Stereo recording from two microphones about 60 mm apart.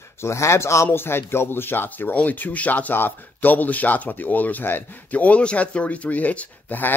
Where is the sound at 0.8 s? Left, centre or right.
Left.